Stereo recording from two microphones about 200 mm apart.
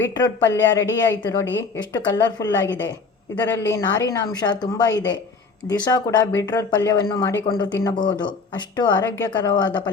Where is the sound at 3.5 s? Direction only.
15° left (ahead or behind).